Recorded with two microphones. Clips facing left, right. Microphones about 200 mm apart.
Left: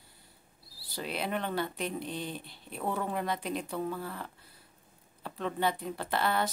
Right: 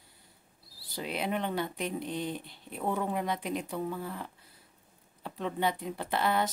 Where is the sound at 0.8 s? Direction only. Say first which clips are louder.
Right 1 dB; 15° right (ahead or behind).